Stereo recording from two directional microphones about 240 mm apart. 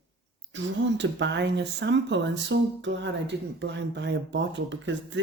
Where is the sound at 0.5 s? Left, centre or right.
Right.